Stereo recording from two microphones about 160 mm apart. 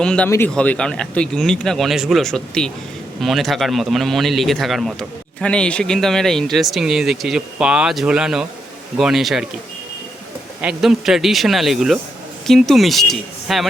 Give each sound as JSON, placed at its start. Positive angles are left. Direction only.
{"t": 0.0, "sound": "a man's voice", "side_deg": 5}
{"t": 10.6, "sound": "a man's voice", "side_deg": -5}